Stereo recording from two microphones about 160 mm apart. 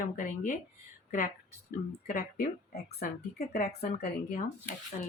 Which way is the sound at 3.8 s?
80° left.